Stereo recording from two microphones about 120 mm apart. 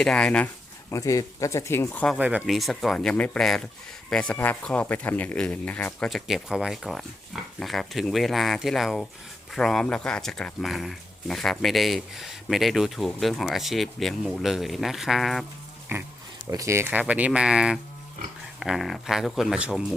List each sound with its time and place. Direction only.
0.0 s speech: 5° left (ahead or behind)
0.9 s speech: 30° left (ahead or behind)
1.9 s speech: 10° left (ahead or behind)
2.1 s speech: 10° right (ahead or behind)
2.5 s speech: centre (ahead or behind)
6.1 s speech: centre (ahead or behind)
15.9 s speech: 20° right (ahead or behind)